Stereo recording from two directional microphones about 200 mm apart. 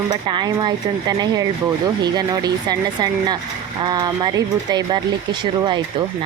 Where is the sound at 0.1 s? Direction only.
20° right (ahead or behind).